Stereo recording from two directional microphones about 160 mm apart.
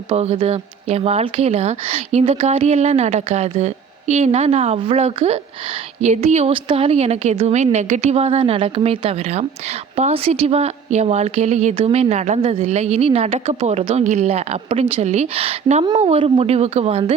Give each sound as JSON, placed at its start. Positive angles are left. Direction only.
{"t": 0.1, "sound": "a woman's voice", "side_deg": -40}